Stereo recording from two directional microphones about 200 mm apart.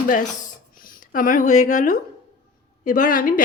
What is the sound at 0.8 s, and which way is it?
A woman's voice, 40° left (ahead or behind).